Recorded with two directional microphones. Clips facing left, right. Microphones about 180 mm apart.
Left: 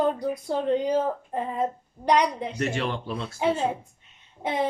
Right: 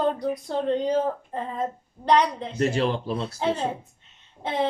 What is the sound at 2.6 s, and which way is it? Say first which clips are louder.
Speech: right 6 dB; 35° right (ahead or behind).